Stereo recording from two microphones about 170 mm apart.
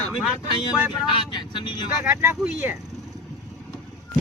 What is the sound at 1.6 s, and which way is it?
Speech, 30° left (ahead or behind).